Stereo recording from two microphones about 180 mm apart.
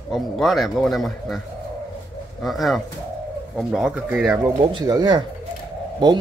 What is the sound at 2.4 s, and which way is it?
A man's voice, centre (ahead or behind).